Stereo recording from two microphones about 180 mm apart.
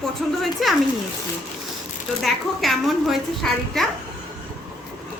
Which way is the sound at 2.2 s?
Centre (ahead or behind).